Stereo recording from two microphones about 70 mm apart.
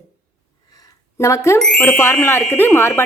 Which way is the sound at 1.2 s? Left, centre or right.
Left.